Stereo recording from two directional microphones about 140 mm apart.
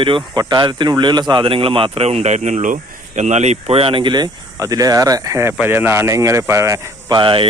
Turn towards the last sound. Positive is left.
turn(degrees=-35)  # may be behind; listen again after turning